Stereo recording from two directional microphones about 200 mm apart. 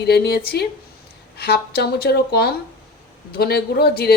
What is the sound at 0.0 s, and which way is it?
A woman's voice, 55° left (ahead or behind).